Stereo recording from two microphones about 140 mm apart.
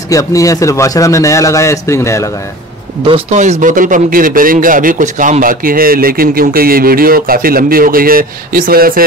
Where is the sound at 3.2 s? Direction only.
60° right (ahead or behind); by 9.0 s 90° right.